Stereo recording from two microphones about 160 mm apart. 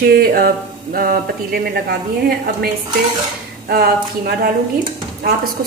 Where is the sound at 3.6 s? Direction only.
75° right (ahead or behind).